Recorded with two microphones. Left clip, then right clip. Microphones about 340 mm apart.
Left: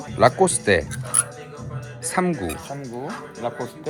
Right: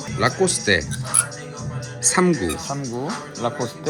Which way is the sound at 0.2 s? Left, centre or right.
Centre.